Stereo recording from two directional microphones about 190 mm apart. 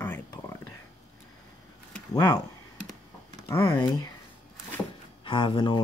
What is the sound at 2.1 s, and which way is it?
Speech, 20° left (ahead or behind).